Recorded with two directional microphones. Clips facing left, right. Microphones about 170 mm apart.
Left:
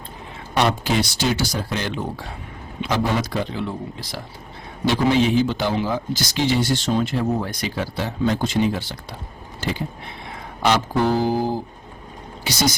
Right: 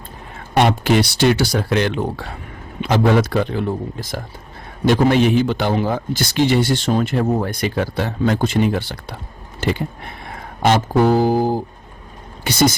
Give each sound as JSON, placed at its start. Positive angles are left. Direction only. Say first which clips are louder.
{"t": 0.5, "sound": "a man's voice", "louder": "right 5 dB", "side_deg": -60}
{"t": 10.3, "sound": "speech", "louder": "right 3 dB", "side_deg": -50}
{"t": 12.5, "sound": "speech", "louder": "right 6 dB", "side_deg": -55}